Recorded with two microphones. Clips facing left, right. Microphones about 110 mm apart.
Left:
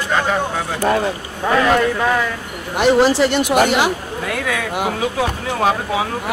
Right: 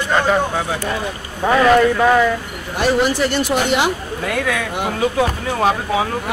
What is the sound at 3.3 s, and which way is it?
Speech, 20° left (ahead or behind).